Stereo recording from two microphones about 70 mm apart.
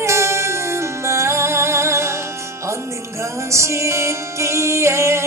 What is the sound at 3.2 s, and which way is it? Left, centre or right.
Music, right.